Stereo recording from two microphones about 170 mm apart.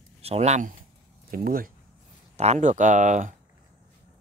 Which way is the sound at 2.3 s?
40° right (ahead or behind).